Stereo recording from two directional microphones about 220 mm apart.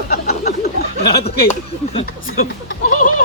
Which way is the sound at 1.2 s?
25° left (ahead or behind).